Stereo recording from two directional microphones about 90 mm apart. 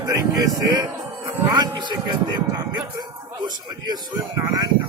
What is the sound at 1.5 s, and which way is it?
Speech, 55° right (ahead or behind).